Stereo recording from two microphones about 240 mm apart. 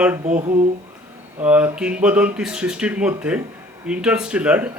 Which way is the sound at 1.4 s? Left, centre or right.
Centre.